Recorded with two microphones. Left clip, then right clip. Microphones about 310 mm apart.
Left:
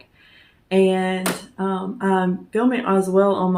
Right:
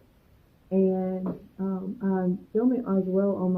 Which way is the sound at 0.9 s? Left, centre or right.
Left.